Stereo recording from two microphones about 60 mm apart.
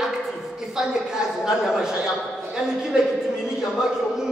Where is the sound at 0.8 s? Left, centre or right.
Centre.